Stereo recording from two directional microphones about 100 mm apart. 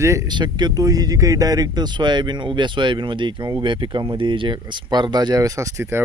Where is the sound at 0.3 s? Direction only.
50° right (ahead or behind).